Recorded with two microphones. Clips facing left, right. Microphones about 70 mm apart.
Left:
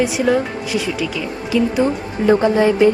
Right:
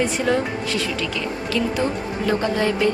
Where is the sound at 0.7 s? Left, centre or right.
Centre.